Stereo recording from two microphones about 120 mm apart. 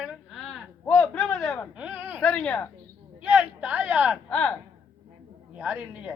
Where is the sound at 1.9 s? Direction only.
15° right (ahead or behind).